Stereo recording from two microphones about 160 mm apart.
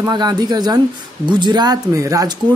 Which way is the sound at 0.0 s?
25° right (ahead or behind).